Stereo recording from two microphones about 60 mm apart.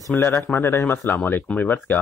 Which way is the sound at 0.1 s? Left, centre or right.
Left.